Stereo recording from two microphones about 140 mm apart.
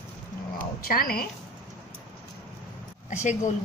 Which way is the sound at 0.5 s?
90° left.